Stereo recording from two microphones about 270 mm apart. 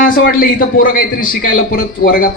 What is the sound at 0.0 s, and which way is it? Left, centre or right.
A man's voice, left.